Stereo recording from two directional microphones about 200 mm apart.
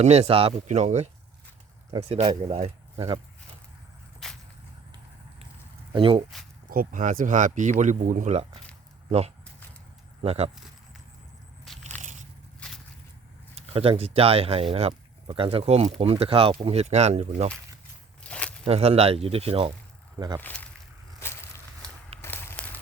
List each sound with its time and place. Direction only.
0.0 s speech: 30° right (ahead or behind)
4.2 s a sound: centre (ahead or behind)
5.9 s speech: 25° right (ahead or behind)
6.7 s speech: 45° right (ahead or behind)
11.9 s biting: 10° left (ahead or behind)
12.5 s a sound: 5° left (ahead or behind)
13.6 s speech: 30° right (ahead or behind)
18.2 s walk: 5° left (ahead or behind)
18.6 s speech: 30° right (ahead or behind)
20.4 s speech: 10° left (ahead or behind)
22.2 s a sound: 10° left (ahead or behind)